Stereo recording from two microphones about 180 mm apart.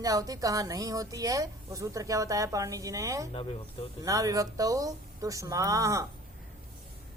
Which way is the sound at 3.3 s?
30° left (ahead or behind).